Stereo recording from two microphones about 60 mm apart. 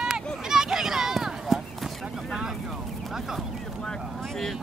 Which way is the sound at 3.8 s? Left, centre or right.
Centre.